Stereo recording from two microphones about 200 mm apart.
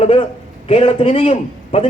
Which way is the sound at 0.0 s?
30° left (ahead or behind).